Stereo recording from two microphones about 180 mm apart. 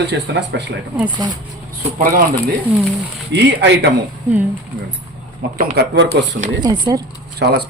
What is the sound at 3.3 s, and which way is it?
Speech, 70° right (ahead or behind).